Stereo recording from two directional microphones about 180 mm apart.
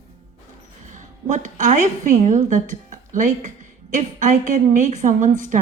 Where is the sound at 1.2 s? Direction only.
45° right (ahead or behind).